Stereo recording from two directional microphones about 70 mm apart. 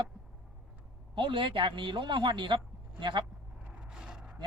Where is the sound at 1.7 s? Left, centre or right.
Right.